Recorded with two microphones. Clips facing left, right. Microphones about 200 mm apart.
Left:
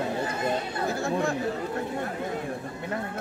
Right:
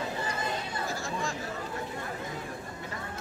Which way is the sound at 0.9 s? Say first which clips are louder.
Left 10 dB; 60° left (ahead or behind).